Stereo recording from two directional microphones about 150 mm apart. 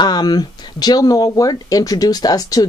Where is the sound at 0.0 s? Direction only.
30° left (ahead or behind).